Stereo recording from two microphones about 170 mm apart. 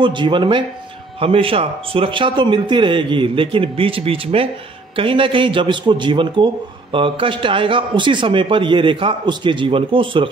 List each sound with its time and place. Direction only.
0.0 s a man's voice: 30° right (ahead or behind)